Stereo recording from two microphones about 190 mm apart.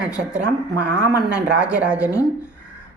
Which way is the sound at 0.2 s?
5° right (ahead or behind).